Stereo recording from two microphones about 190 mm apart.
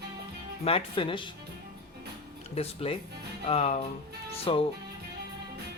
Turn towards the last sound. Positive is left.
turn(degrees=25)  # may be behind; listen again after turning